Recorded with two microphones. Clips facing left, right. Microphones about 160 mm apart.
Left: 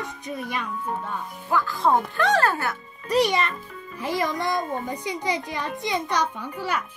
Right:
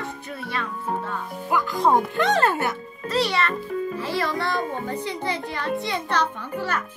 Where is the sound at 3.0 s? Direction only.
15° left (ahead or behind).